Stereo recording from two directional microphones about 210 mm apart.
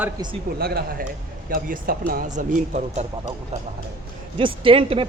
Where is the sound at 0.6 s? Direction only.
45° right (ahead or behind); by 3.1 s 30° right (ahead or behind).